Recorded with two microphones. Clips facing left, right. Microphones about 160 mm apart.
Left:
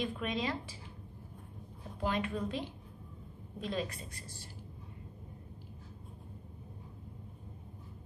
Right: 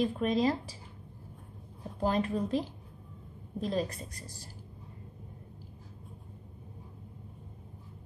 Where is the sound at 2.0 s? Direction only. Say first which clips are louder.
Right 5 dB; 35° right (ahead or behind).